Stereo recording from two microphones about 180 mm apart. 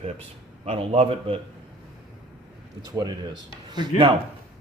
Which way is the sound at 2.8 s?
20° right (ahead or behind).